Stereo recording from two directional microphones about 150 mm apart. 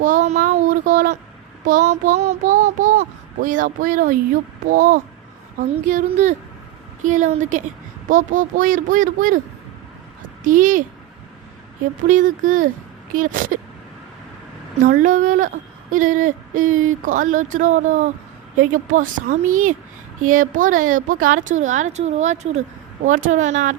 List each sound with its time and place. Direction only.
0.0 s a sound: 60° right (ahead or behind)
1.6 s speech: 55° right (ahead or behind)
10.4 s speech: 60° right (ahead or behind)
12.0 s speech: 60° right (ahead or behind)
14.8 s a woman's voice: 60° right (ahead or behind)